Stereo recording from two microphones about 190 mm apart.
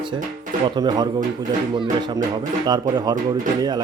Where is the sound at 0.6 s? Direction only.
25° right (ahead or behind).